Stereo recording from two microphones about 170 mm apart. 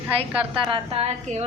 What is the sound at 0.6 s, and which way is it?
Speech, 30° right (ahead or behind).